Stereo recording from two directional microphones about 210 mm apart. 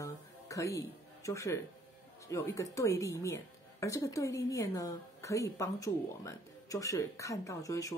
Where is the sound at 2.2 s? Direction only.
15° left (ahead or behind).